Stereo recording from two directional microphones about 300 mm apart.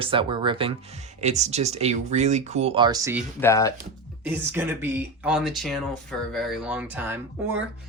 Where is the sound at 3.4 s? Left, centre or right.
Centre.